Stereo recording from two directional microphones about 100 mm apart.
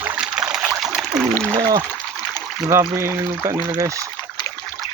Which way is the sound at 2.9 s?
30° right (ahead or behind).